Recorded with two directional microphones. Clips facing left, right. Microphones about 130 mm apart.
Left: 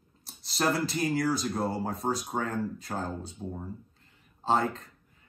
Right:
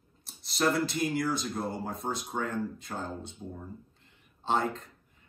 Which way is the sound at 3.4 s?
25° left (ahead or behind).